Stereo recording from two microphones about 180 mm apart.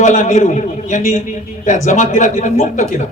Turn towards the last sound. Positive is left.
turn(degrees=40)  # may be behind; listen again after turning